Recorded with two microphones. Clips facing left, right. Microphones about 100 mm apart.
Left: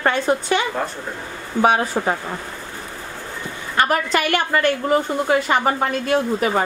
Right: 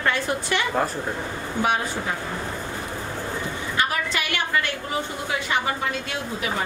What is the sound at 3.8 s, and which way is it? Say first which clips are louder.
A woman's voice: left 8 dB; 50° left (ahead or behind).